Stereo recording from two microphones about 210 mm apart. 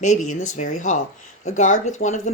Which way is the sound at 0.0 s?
35° left (ahead or behind).